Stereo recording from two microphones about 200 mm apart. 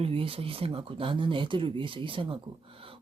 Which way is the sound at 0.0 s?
30° right (ahead or behind).